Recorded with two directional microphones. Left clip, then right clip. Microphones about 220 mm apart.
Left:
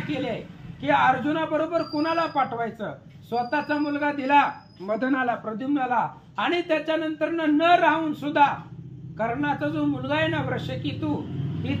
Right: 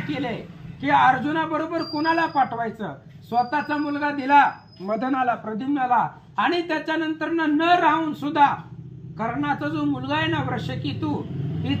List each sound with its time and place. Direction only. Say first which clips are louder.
0.8 s a man's voice: right 3 dB; 20° right (ahead or behind)